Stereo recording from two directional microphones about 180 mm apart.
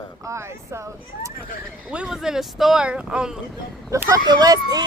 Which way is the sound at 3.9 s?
15° right (ahead or behind).